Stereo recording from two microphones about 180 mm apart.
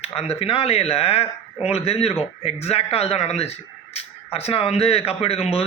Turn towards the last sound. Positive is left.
turn(degrees=35)  # may be behind; listen again after turning